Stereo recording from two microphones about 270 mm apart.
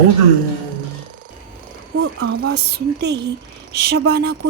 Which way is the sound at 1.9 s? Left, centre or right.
Right.